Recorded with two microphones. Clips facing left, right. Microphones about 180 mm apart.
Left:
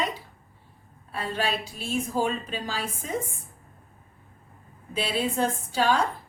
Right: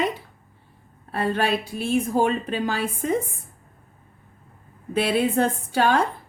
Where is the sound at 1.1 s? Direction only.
55° right (ahead or behind).